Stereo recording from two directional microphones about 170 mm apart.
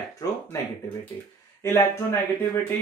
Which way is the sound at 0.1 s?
20° left (ahead or behind).